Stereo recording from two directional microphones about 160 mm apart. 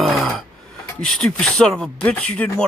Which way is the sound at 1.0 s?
Centre (ahead or behind).